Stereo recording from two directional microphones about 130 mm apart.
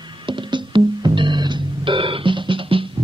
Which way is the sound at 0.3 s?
40° right (ahead or behind).